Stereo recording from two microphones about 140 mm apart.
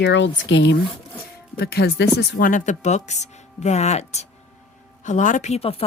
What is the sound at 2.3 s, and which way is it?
Speech, 80° left.